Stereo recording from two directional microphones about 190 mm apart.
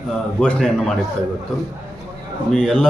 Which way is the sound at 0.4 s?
5° left (ahead or behind).